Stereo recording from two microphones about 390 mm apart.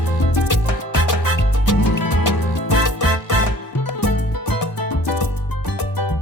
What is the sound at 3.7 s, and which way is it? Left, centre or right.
Music, left.